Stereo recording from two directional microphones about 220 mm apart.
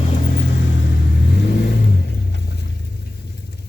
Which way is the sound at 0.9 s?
50° left (ahead or behind).